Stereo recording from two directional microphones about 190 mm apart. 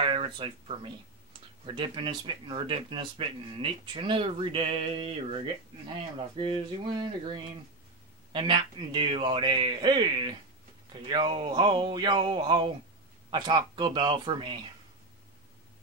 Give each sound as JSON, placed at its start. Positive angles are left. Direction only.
{"t": 0.0, "sound": "speech", "side_deg": -25}